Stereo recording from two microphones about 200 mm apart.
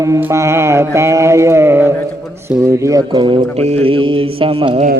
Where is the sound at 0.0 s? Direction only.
15° right (ahead or behind).